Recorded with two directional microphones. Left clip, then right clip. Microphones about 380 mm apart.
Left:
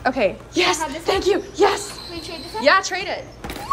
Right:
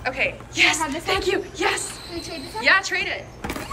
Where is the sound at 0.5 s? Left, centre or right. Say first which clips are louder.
Even; centre.